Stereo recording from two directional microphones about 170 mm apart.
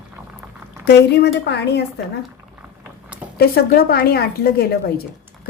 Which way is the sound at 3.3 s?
65° left (ahead or behind).